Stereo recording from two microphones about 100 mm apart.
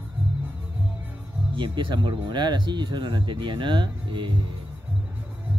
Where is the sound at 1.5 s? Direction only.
55° right (ahead or behind).